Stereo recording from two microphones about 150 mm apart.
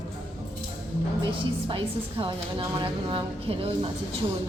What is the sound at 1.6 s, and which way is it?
A woman's voice, 35° right (ahead or behind).